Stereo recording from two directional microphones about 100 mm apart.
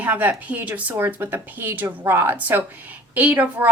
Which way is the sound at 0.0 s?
15° right (ahead or behind).